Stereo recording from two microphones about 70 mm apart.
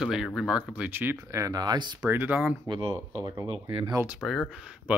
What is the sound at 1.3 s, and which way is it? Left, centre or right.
Speech, right.